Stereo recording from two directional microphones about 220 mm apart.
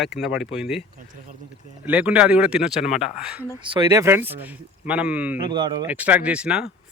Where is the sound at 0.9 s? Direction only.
40° right (ahead or behind).